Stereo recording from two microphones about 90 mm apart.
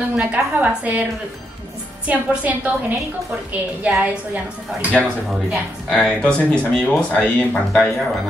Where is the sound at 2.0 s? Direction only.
15° right (ahead or behind).